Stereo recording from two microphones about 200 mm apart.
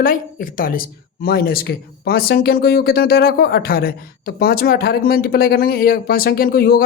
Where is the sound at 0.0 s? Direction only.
45° left (ahead or behind).